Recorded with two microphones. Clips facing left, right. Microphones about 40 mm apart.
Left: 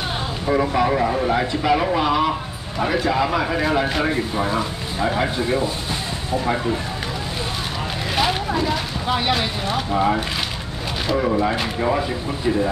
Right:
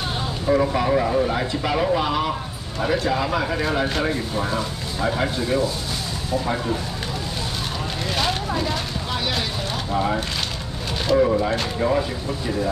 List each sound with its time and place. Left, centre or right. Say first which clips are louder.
0.5 s speech: left 1 dB; centre
8.2 s vehicle: left 4 dB; centre
9.3 s speech: left 4 dB; centre
11.3 s speech: left 1 dB; centre